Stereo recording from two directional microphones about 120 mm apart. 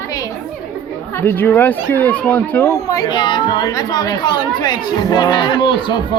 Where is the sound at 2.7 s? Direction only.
30° left (ahead or behind).